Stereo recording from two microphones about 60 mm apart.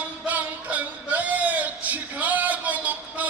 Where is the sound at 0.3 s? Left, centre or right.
Right.